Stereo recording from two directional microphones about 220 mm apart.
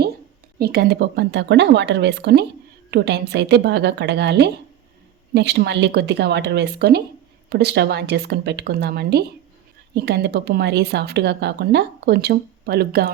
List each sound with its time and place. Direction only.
0.6 s speech: 45° right (ahead or behind)